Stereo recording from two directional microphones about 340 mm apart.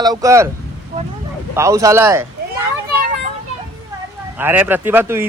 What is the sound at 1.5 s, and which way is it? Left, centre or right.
Speech, centre.